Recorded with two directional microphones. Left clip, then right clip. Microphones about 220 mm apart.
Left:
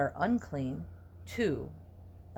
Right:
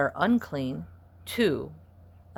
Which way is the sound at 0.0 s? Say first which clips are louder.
Right 6 dB; 35° right (ahead or behind).